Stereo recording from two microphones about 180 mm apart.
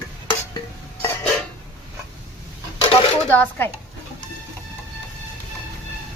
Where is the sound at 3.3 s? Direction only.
10° left (ahead or behind).